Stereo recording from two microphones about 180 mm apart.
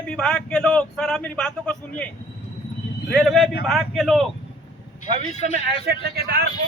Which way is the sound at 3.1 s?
Centre (ahead or behind).